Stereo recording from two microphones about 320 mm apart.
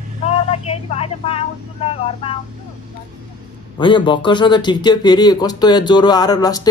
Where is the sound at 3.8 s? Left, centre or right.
Centre.